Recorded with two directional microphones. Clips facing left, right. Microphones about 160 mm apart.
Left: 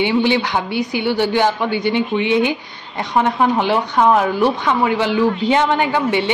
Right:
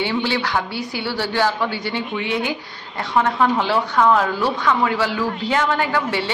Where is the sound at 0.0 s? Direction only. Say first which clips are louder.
Left 5 dB; 20° left (ahead or behind).